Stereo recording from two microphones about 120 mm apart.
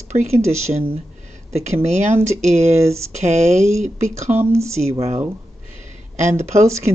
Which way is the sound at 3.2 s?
70° right (ahead or behind).